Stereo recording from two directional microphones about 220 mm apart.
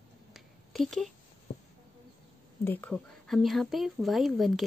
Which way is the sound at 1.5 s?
50° left (ahead or behind).